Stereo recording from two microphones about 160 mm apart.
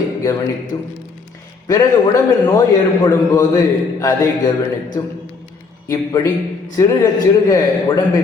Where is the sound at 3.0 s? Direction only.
20° left (ahead or behind).